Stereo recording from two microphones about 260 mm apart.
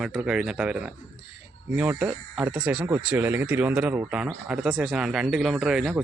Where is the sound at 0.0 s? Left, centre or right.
Centre.